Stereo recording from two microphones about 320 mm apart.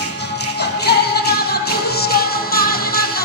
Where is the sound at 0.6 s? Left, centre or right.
Left.